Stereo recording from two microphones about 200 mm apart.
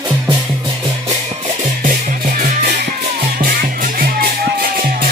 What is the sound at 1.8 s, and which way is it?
Music, 40° right (ahead or behind).